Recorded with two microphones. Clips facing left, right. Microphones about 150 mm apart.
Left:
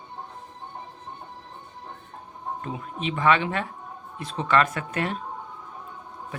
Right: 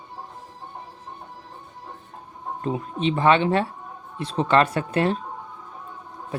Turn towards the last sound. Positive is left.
turn(degrees=-35)  # may be behind; listen again after turning